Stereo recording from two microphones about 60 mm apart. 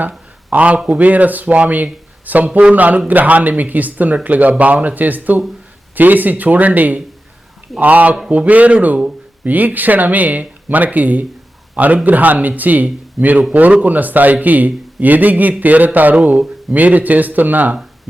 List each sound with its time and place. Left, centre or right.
0.5 s a man's voice: right